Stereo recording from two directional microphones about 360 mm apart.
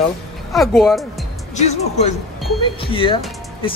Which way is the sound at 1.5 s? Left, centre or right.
Centre.